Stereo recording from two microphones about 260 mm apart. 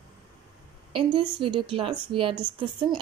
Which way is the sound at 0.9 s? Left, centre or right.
Centre.